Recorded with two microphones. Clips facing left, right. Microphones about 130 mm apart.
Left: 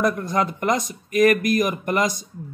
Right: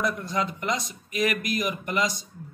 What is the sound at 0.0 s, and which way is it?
A woman's voice, 50° left (ahead or behind).